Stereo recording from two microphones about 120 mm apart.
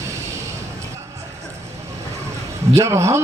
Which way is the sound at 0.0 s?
25° right (ahead or behind).